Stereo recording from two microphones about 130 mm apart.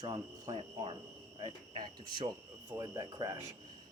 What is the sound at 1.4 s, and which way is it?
Speech, 35° right (ahead or behind).